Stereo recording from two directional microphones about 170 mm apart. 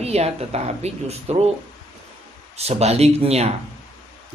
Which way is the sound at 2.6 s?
40° right (ahead or behind).